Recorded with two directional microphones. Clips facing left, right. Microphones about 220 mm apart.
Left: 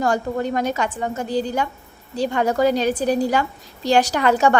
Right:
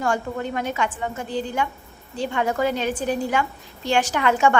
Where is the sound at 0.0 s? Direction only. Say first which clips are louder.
Left 4 dB; 40° left (ahead or behind).